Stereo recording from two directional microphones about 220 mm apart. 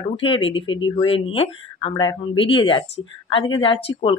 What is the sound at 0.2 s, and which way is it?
Speech, 25° left (ahead or behind).